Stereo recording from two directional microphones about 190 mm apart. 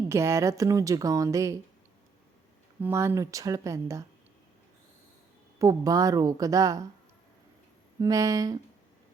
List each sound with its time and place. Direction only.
0.1 s a woman's voice: 15° right (ahead or behind)
2.8 s a woman's voice: 10° right (ahead or behind)
5.5 s a woman's voice: 20° right (ahead or behind)
8.0 s a woman's voice: 20° right (ahead or behind)